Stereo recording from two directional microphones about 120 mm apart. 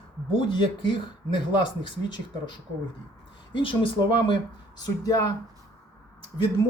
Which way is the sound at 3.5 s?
45° left (ahead or behind).